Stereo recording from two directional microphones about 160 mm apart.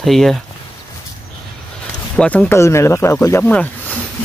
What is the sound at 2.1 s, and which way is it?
Speech, 10° left (ahead or behind).